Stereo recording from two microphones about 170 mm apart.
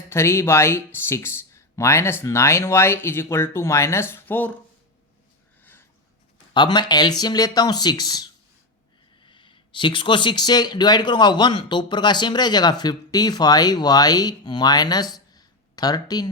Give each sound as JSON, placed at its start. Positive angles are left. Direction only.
{"t": 0.1, "sound": "speech", "side_deg": 15}
{"t": 6.5, "sound": "speech", "side_deg": 25}